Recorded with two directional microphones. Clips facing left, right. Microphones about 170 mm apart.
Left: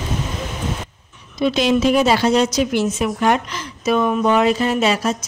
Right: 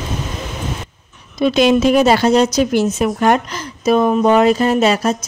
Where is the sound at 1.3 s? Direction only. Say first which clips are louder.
Right 4 dB; 50° right (ahead or behind).